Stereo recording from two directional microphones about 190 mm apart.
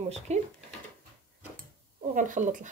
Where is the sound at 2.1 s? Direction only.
45° right (ahead or behind).